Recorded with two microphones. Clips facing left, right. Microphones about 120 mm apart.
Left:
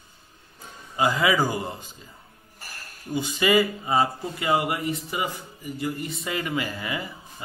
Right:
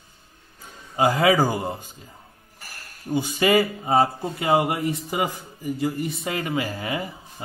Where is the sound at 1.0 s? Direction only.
55° right (ahead or behind).